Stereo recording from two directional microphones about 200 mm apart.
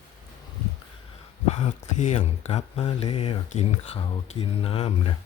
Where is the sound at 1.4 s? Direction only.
35° left (ahead or behind).